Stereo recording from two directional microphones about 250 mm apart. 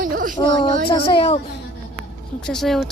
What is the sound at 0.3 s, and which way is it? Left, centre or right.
A child's voice, centre.